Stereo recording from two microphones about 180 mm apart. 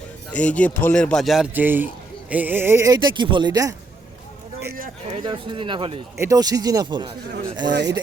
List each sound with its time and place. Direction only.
0.3 s speech: 5° left (ahead or behind); by 3.8 s 20° right (ahead or behind)
5.0 s speech: 30° right (ahead or behind)
6.1 s speech: 20° right (ahead or behind)
7.7 s speech: 70° right (ahead or behind)